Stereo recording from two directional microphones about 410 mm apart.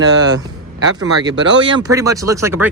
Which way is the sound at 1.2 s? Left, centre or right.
Centre.